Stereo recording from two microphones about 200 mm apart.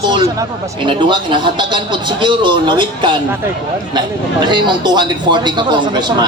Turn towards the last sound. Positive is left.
turn(degrees=-20)  # may be behind; listen again after turning